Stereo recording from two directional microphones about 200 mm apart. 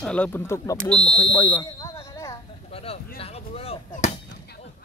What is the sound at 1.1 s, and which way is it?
Speech, 20° left (ahead or behind).